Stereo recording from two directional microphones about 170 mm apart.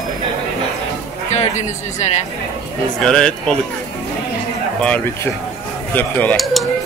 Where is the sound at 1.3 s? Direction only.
40° left (ahead or behind).